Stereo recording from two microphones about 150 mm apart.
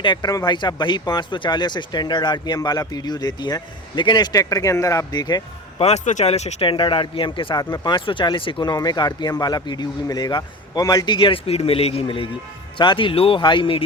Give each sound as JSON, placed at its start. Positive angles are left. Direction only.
{"t": 0.0, "sound": "speech", "side_deg": 30}
{"t": 5.8, "sound": "speech", "side_deg": 50}